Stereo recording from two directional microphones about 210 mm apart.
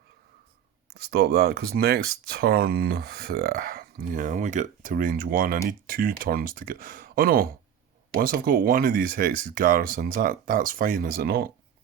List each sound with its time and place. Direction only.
0.9 s speech: 50° right (ahead or behind)